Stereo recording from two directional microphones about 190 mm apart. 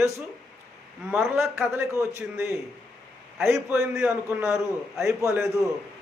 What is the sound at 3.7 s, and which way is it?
A man's voice, 5° right (ahead or behind).